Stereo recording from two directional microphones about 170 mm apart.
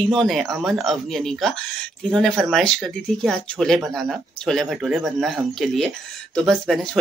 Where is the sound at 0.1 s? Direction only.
Centre (ahead or behind).